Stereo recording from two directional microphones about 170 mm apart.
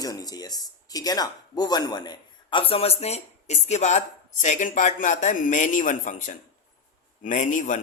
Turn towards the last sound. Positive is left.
turn(degrees=50)  # may be behind; listen again after turning